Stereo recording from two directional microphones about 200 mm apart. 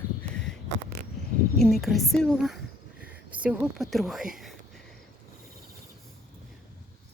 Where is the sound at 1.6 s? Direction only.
Centre (ahead or behind).